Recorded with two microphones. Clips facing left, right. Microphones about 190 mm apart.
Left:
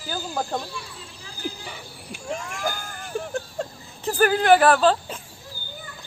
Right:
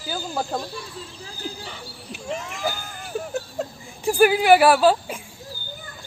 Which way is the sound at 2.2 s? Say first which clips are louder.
Right 1 dB; 5° right (ahead or behind).